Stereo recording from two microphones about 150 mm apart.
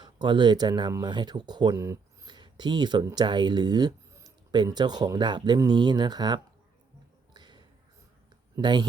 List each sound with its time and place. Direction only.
0.0 s speech: 30° right (ahead or behind)
7.3 s a sound: 30° right (ahead or behind)
8.5 s speech: 30° right (ahead or behind)